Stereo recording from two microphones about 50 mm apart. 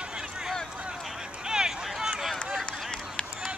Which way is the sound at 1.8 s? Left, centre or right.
Centre.